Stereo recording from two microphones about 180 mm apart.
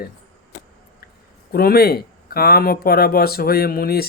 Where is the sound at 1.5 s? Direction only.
60° left (ahead or behind).